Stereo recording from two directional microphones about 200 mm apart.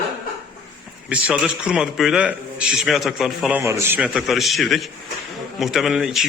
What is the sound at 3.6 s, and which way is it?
A man's voice, 15° right (ahead or behind).